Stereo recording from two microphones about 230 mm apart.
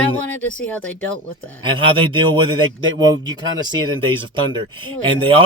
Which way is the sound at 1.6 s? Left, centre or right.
Right.